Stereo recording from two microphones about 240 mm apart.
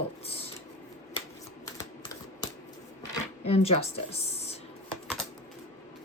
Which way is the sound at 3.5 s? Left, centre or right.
Left.